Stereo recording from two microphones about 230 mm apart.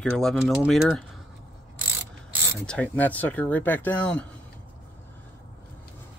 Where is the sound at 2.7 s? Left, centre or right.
Centre.